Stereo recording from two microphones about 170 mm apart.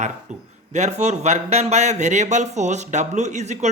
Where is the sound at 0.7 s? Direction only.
40° right (ahead or behind).